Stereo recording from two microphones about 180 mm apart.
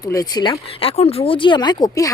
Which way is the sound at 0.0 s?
20° left (ahead or behind).